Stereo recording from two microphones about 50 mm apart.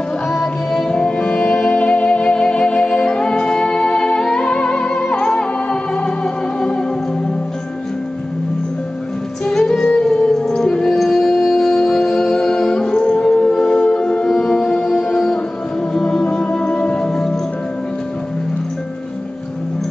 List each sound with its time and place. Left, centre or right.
0.3 s music: centre
9.5 s music: centre